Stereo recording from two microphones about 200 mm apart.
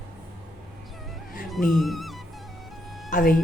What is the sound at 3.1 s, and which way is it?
Speech, 45° left (ahead or behind).